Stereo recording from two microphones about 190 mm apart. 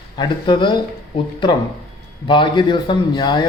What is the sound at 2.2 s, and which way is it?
Speech, 25° left (ahead or behind).